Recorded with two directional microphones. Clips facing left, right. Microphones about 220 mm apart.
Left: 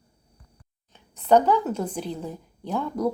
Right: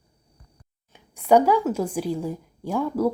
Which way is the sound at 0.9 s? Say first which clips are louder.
Right 1 dB; 10° right (ahead or behind).